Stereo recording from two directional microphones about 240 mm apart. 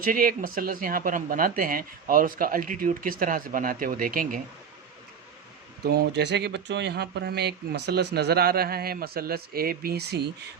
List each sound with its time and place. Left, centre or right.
0.0 s speech: right
5.8 s speech: right